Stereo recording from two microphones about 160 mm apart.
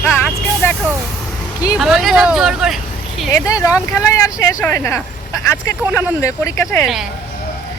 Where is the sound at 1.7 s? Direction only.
Centre (ahead or behind).